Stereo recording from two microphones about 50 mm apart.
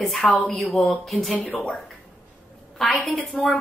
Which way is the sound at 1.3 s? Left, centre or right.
Left.